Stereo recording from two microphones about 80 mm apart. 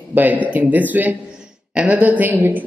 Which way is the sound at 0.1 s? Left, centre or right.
Right.